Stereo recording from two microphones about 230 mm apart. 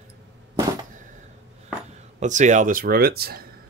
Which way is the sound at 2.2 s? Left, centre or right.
Right.